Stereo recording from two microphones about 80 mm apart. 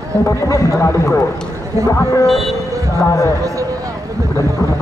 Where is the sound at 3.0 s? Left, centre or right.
Left.